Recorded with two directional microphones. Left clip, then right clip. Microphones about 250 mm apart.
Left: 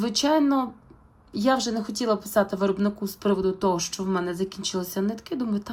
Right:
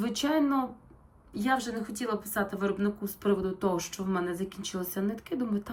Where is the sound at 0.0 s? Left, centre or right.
Centre.